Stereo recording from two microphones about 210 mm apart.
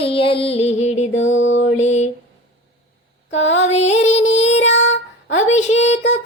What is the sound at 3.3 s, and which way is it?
Music, 60° left (ahead or behind).